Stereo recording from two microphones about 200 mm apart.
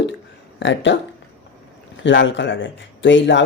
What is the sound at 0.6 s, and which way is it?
Speech, 65° left (ahead or behind).